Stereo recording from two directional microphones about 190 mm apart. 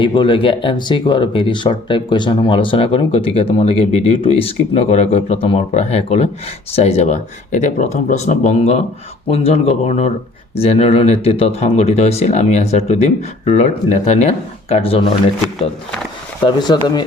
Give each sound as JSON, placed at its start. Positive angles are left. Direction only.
{"t": 0.0, "sound": "speech", "side_deg": 25}
{"t": 16.6, "sound": "speech", "side_deg": 20}